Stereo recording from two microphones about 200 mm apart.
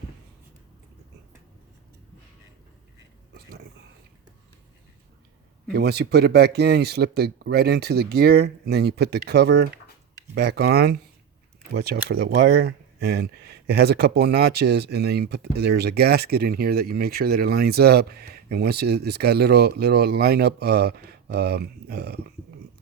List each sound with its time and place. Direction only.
5.7 s speech: 55° right (ahead or behind)